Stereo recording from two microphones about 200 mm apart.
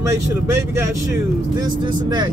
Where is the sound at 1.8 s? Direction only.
20° right (ahead or behind).